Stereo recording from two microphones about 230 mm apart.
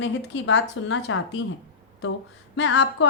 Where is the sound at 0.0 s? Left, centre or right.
Left.